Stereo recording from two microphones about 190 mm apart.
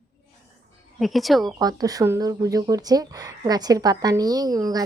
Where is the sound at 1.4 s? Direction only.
20° right (ahead or behind).